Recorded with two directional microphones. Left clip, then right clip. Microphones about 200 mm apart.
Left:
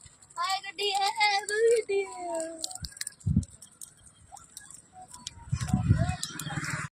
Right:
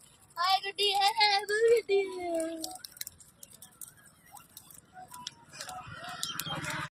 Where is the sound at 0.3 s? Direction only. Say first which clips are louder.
Right 3 dB; 45° right (ahead or behind).